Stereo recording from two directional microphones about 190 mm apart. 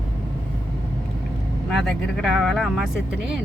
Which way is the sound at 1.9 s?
Centre (ahead or behind).